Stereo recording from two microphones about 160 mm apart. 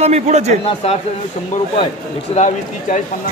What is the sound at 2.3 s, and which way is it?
Speech, 50° left (ahead or behind).